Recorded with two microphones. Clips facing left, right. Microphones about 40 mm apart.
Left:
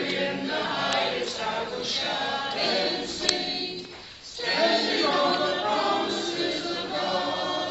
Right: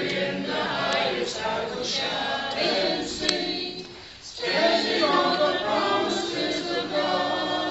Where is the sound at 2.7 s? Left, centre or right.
Right.